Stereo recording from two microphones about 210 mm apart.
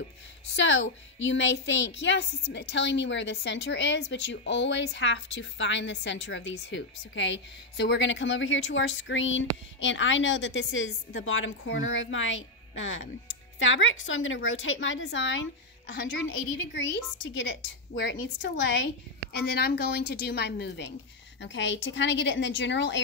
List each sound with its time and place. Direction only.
0.6 s a woman's voice: 60° left (ahead or behind)